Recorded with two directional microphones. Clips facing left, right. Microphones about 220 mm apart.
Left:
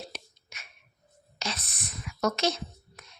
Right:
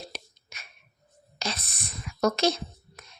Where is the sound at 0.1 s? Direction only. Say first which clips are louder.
Right 2 dB; 35° right (ahead or behind).